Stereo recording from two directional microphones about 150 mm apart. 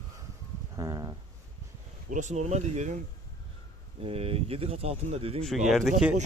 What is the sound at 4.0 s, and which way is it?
Speech, 40° right (ahead or behind).